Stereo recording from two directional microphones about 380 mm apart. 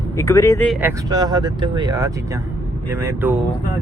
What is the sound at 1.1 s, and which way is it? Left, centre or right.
Speech, centre.